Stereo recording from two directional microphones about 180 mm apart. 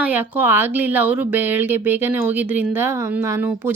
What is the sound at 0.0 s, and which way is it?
Speech, 10° right (ahead or behind).